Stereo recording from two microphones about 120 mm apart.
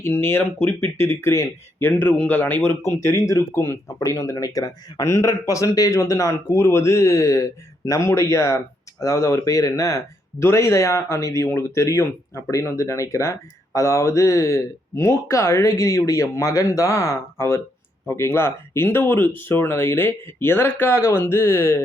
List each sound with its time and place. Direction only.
0.0 s speech: 20° left (ahead or behind)